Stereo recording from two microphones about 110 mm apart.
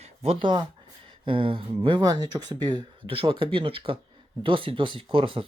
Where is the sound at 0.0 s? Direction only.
65° right (ahead or behind); by 3.2 s 40° right (ahead or behind).